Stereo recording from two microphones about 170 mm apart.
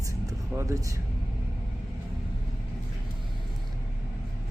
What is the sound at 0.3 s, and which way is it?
Speech, 20° right (ahead or behind).